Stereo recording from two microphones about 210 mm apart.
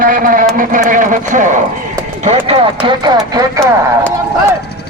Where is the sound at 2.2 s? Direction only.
25° right (ahead or behind).